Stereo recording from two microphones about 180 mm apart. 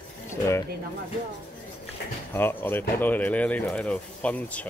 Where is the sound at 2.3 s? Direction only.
10° left (ahead or behind).